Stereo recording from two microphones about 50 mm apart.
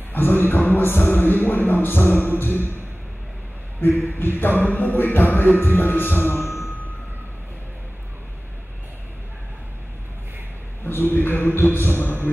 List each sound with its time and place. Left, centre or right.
0.1 s music: left
3.8 s music: left
10.9 s music: left